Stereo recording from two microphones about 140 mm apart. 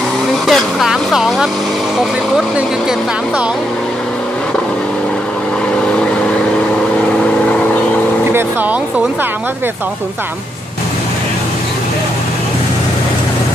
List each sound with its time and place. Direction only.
0.5 s vehicle: centre (ahead or behind)